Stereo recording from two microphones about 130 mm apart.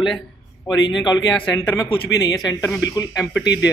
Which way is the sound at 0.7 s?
35° left (ahead or behind).